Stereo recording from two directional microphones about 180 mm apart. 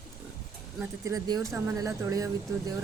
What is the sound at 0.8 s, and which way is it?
A woman's voice, 20° right (ahead or behind).